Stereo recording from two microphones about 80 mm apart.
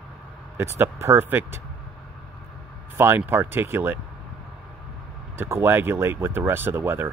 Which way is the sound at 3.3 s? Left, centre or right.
Right.